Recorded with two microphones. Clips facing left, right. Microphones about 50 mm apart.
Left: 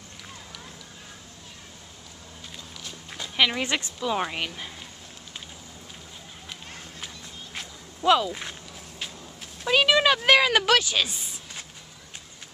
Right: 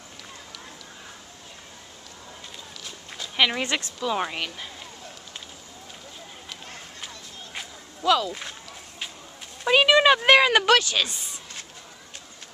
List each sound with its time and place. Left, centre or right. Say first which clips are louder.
3.3 s speech: right 1 dB; centre
8.0 s speech: left 1 dB; left
8.3 s speech: even; centre
9.7 s speech: right 3 dB; centre
10.8 s a sound: even; centre